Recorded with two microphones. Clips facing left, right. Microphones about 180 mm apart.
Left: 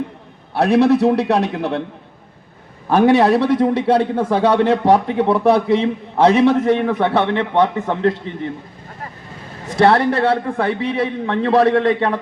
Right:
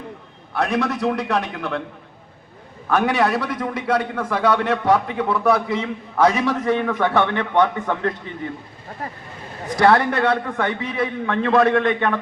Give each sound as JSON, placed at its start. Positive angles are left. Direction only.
{"t": 0.5, "sound": "a man's voice", "side_deg": 30}
{"t": 2.9, "sound": "a man's voice", "side_deg": 30}
{"t": 9.7, "sound": "a man's voice", "side_deg": 30}